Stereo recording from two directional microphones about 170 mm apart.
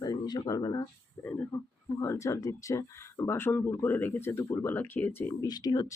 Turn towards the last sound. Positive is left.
turn(degrees=20)  # may be behind; listen again after turning